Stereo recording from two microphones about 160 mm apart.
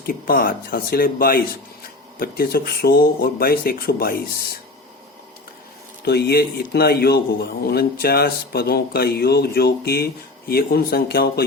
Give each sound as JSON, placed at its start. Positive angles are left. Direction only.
{"t": 0.0, "sound": "speech", "side_deg": 65}
{"t": 6.1, "sound": "speech", "side_deg": 85}